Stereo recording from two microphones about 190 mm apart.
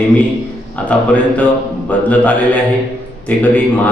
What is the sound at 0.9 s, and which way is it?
A man's voice, 10° left (ahead or behind).